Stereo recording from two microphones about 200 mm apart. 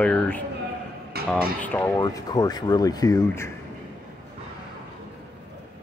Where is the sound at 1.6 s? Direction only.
10° left (ahead or behind).